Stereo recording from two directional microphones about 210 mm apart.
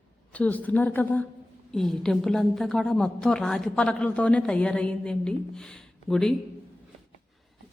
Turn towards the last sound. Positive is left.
turn(degrees=0)  # may be behind; listen again after turning